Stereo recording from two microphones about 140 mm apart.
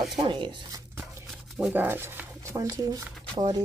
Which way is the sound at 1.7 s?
15° right (ahead or behind).